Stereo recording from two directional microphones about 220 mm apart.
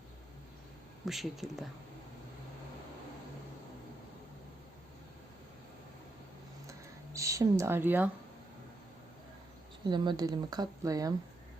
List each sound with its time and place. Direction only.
1.0 s speech: centre (ahead or behind)
6.7 s a sound: 15° right (ahead or behind)
9.8 s speech: 20° right (ahead or behind)